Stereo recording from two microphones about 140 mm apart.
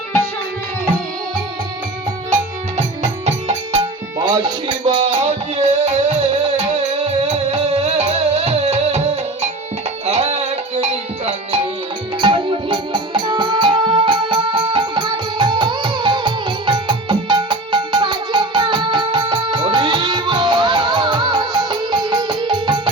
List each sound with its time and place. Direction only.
2.3 s music: 55° right (ahead or behind)
3.7 s music: 35° right (ahead or behind)
5.0 s music: 50° right (ahead or behind)
12.2 s music: 35° right (ahead or behind)